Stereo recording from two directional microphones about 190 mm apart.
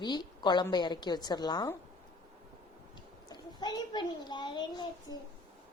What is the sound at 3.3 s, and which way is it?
A child's voice, 20° left (ahead or behind).